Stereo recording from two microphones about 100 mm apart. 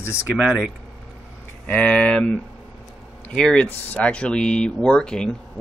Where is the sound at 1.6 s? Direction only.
10° left (ahead or behind).